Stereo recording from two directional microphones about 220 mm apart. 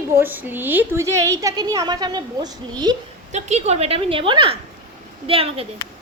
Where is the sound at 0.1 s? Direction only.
10° right (ahead or behind).